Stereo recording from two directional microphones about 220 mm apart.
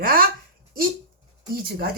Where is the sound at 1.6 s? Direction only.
45° right (ahead or behind).